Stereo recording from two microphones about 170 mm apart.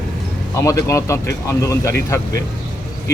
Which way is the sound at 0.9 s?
15° left (ahead or behind).